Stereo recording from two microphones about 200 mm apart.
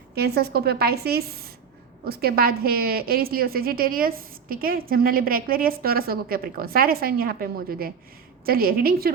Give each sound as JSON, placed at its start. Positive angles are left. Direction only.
{"t": 0.1, "sound": "a woman's voice", "side_deg": -55}